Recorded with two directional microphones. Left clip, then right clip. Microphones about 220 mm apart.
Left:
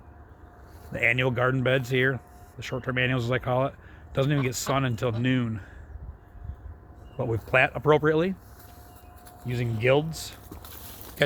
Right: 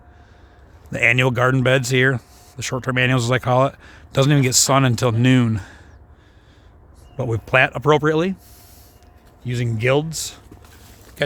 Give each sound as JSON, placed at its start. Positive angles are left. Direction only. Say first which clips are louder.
{"t": 0.9, "sound": "speech", "louder": "right 7 dB", "side_deg": -45}
{"t": 7.2, "sound": "speech", "louder": "right 6 dB", "side_deg": -40}
{"t": 9.4, "sound": "speech", "louder": "right 5 dB", "side_deg": -50}